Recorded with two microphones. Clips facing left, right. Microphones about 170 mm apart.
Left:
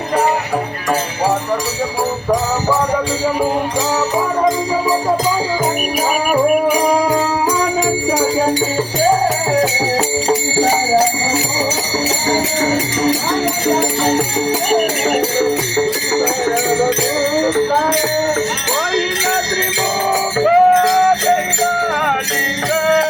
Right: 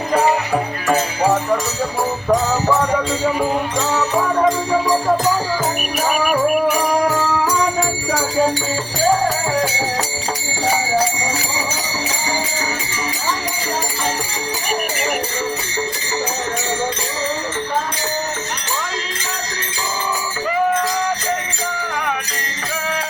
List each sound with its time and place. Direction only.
6.3 s music: 15° left (ahead or behind)
14.7 s jingle bell: 50° left (ahead or behind)
20.1 s music: 80° left